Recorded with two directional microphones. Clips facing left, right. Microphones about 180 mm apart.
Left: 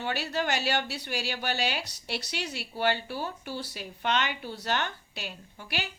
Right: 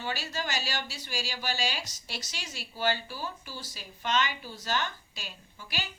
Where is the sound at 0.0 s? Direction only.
60° left (ahead or behind).